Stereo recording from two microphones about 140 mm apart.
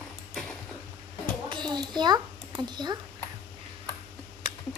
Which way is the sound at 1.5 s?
35° right (ahead or behind).